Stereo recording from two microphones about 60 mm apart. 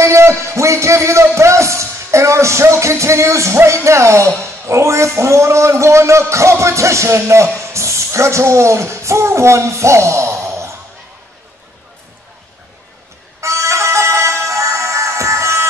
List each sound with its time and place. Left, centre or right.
0.0 s a man's voice: right
13.4 s music: right